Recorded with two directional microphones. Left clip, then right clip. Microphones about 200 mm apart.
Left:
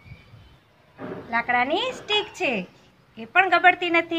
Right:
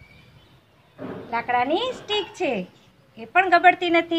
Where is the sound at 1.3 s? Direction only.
25° right (ahead or behind).